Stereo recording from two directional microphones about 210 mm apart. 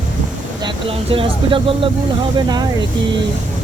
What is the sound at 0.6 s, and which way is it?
Speech, 25° right (ahead or behind).